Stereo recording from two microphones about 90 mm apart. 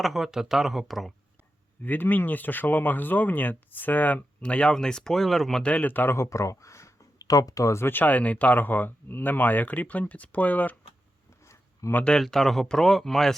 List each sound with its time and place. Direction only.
0.0 s speech: centre (ahead or behind)
1.8 s speech: 20° left (ahead or behind)
11.3 s a sound: 35° left (ahead or behind)
11.9 s speech: 10° left (ahead or behind)